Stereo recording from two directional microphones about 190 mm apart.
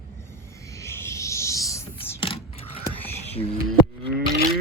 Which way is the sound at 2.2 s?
30° left (ahead or behind).